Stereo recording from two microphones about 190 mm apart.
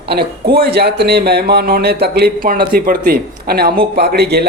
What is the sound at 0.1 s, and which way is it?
Speech, 55° right (ahead or behind).